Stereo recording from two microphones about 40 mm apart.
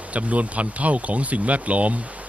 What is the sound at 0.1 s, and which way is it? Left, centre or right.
Speech, right.